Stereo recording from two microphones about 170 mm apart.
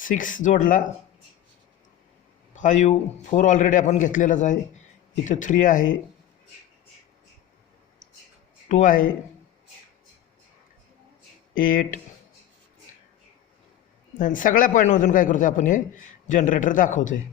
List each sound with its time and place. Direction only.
0.0 s a man's voice: 50° left (ahead or behind)
2.6 s a man's voice: 45° left (ahead or behind)
8.7 s a man's voice: 50° left (ahead or behind)
11.5 s speech: 55° left (ahead or behind)
14.2 s a man's voice: 50° left (ahead or behind)